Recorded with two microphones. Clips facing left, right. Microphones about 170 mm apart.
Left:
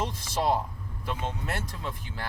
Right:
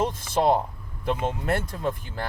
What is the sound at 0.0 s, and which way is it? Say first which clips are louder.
Speech: right 6 dB; 50° right (ahead or behind).